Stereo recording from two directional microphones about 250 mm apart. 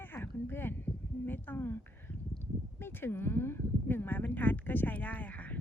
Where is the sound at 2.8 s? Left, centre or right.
Centre.